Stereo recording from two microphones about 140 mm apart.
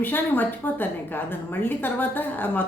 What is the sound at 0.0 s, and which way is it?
A woman's voice, 15° left (ahead or behind).